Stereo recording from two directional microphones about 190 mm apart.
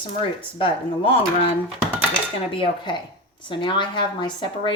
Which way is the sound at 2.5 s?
25° left (ahead or behind).